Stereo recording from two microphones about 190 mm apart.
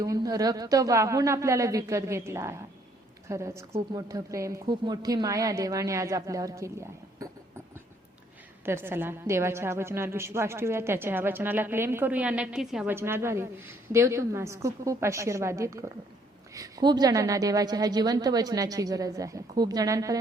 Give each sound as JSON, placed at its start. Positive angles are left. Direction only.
{"t": 0.0, "sound": "a woman's voice", "side_deg": -20}
{"t": 8.6, "sound": "a woman's voice", "side_deg": -10}